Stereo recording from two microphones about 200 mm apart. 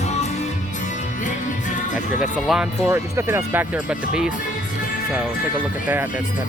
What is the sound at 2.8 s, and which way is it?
Speech, 15° right (ahead or behind).